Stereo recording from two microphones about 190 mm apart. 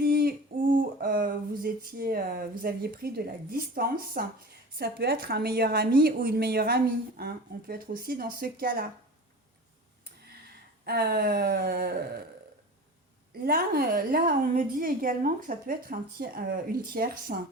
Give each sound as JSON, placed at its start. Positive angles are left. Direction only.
{"t": 0.0, "sound": "a sound", "side_deg": -55}
{"t": 3.5, "sound": "a woman's voice", "side_deg": -50}
{"t": 10.8, "sound": "a woman's voice", "side_deg": -55}
{"t": 13.4, "sound": "a woman's voice", "side_deg": -50}